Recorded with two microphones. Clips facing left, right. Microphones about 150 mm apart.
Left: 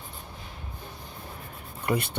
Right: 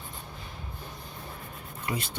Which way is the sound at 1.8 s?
60° left (ahead or behind).